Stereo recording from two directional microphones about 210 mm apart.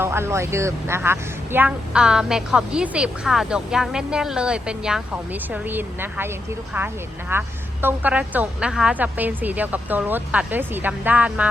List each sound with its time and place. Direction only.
0.0 s a woman's voice: 10° right (ahead or behind)